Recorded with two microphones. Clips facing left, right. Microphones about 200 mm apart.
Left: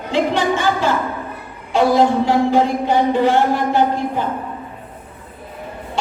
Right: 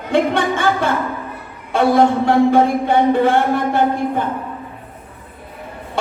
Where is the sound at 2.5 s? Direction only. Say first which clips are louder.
Right 2 dB; 50° right (ahead or behind).